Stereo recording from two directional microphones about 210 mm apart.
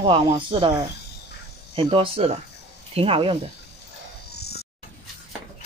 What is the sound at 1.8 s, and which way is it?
Speech, 25° right (ahead or behind).